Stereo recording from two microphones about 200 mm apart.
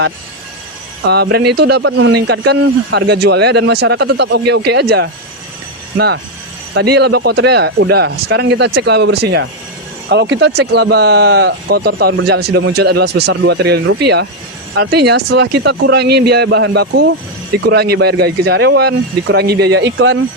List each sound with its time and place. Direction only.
1.0 s speech: 55° right (ahead or behind)
6.7 s speech: 55° right (ahead or behind)